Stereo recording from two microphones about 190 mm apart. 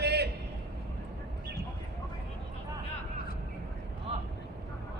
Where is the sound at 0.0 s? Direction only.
60° right (ahead or behind).